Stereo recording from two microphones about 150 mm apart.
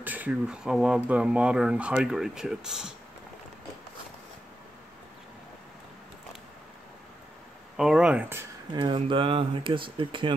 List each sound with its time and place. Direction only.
0.0 s speech: 10° right (ahead or behind)
7.7 s speech: 5° right (ahead or behind)
8.7 s speech: 35° right (ahead or behind)